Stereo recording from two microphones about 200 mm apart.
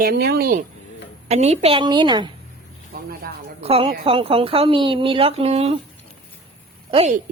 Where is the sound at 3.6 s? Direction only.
30° right (ahead or behind).